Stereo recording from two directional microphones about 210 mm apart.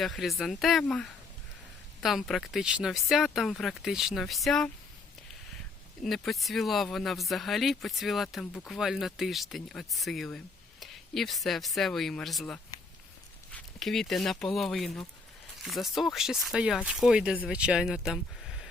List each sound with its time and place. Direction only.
0.0 s speech: centre (ahead or behind)
6.0 s speech: centre (ahead or behind)